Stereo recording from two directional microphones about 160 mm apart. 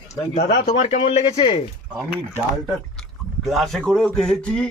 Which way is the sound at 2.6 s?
Centre (ahead or behind).